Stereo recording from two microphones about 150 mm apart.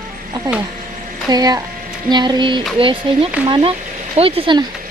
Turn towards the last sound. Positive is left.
turn(degrees=-35)  # may be behind; listen again after turning